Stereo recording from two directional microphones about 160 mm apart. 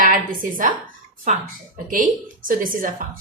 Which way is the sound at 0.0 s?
60° right (ahead or behind).